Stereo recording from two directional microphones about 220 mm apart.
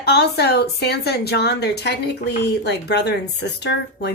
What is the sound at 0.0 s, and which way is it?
A woman's voice, 45° left (ahead or behind).